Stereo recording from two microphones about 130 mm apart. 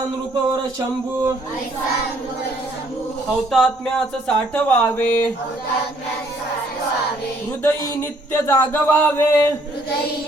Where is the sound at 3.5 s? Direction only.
5° left (ahead or behind).